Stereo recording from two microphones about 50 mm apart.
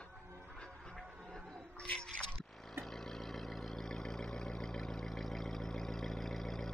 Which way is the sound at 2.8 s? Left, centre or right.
Centre.